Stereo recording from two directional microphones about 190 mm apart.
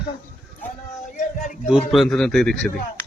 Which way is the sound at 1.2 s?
40° left (ahead or behind).